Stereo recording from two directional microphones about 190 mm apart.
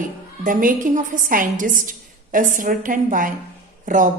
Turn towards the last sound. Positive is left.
turn(degrees=-45)  # may be behind; listen again after turning